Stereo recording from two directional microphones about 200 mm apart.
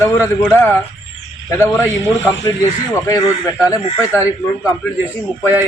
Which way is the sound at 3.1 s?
15° left (ahead or behind).